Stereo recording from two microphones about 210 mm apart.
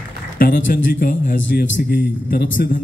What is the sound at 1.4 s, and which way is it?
A man's voice, 55° left (ahead or behind).